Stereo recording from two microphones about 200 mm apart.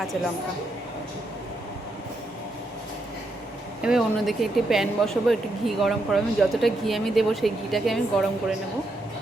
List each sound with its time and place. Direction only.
3.8 s speech: centre (ahead or behind)